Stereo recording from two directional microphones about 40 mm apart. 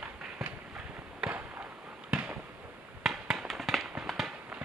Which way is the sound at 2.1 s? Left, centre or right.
Right.